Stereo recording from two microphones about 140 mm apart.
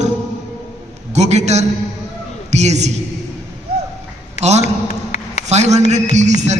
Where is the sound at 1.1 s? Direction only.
50° right (ahead or behind).